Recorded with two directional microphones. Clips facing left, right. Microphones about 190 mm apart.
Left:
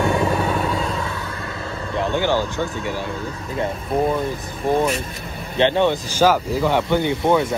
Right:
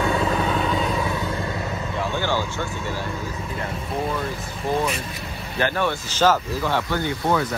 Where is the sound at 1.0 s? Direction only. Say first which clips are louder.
Right 3 dB; 20° right (ahead or behind).